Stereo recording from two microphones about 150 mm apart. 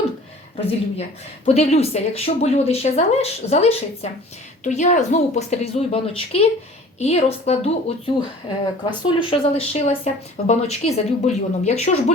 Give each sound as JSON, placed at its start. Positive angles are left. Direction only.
{"t": 0.5, "sound": "speech", "side_deg": 40}
{"t": 8.9, "sound": "speech", "side_deg": 30}